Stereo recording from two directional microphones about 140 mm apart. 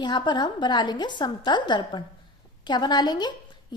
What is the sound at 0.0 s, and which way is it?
A woman's voice, 30° left (ahead or behind).